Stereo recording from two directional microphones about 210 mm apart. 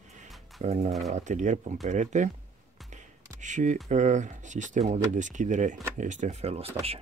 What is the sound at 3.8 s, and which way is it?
Speech, 35° right (ahead or behind).